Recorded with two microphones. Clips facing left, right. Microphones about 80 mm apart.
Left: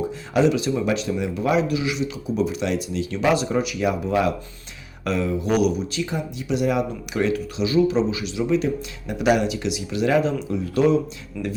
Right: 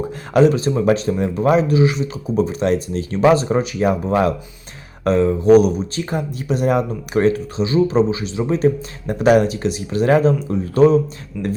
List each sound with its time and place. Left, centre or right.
0.3 s speech: right
11.4 s speech: centre